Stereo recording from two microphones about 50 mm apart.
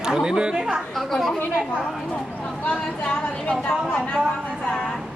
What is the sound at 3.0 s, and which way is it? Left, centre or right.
Speech, centre.